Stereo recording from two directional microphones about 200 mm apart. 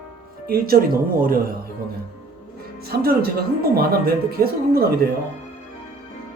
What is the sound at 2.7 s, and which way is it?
Speech, 50° right (ahead or behind).